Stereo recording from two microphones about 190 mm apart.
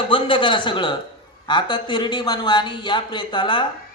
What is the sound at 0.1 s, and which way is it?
A man's voice, 25° left (ahead or behind).